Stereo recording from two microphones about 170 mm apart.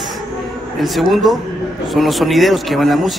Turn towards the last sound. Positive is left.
turn(degrees=0)  # may be behind; listen again after turning